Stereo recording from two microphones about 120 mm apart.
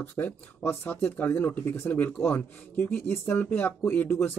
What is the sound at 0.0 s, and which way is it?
Speech, 15° left (ahead or behind).